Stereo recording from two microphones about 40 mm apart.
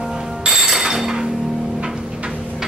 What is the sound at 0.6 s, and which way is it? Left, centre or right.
Music, centre.